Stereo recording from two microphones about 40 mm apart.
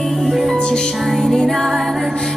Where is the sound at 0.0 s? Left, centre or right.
Centre.